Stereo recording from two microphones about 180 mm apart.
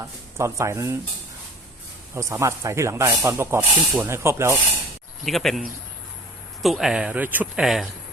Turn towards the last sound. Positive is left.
turn(degrees=0)  # may be behind; listen again after turning